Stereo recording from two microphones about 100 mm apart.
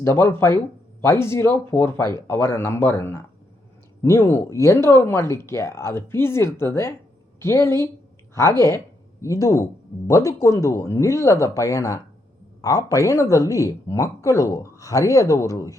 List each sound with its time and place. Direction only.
0.0 s speech: 25° left (ahead or behind)